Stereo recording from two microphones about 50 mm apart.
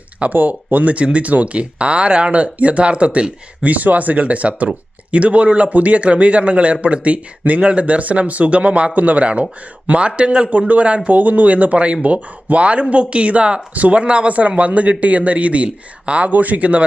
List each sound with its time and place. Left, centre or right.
0.3 s speech: right